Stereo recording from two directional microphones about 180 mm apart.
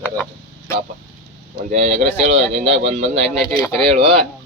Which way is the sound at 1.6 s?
45° right (ahead or behind).